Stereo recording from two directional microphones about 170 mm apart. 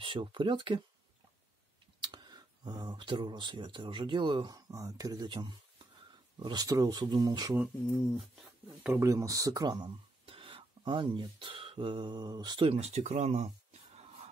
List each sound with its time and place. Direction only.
0.0 s speech: 30° right (ahead or behind)
2.0 s speech: 25° right (ahead or behind)
7.5 s speech: 5° right (ahead or behind)
8.8 s speech: 15° right (ahead or behind); by 13.5 s 40° right (ahead or behind)
13.9 s music: 40° right (ahead or behind)